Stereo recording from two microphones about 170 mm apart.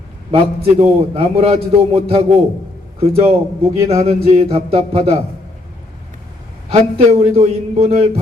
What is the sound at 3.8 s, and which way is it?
A man's voice, 35° right (ahead or behind).